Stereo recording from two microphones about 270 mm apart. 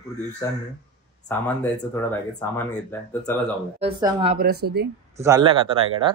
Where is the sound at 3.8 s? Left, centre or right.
Right.